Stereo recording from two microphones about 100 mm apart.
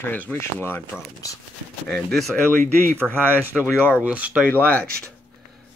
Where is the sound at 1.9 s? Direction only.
Centre (ahead or behind).